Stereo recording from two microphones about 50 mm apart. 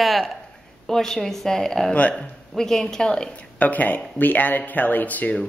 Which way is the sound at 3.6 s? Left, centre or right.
Left.